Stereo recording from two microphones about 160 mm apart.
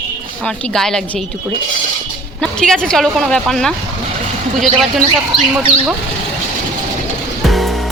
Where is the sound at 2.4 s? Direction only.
5° left (ahead or behind).